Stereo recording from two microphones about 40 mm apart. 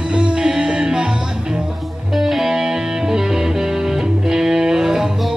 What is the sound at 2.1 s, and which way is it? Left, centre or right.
Music, centre.